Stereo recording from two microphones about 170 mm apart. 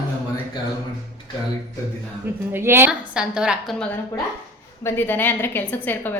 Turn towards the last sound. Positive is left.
turn(degrees=10)  # may be behind; listen again after turning